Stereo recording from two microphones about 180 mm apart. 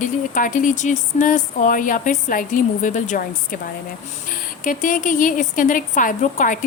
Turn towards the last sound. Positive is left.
turn(degrees=45)  # may be behind; listen again after turning